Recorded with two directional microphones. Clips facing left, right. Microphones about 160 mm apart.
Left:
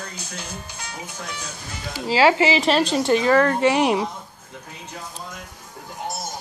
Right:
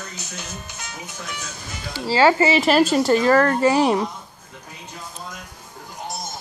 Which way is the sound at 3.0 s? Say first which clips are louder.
Right 1 dB; 15° left (ahead or behind).